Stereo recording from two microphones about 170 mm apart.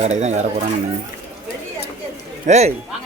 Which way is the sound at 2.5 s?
40° right (ahead or behind).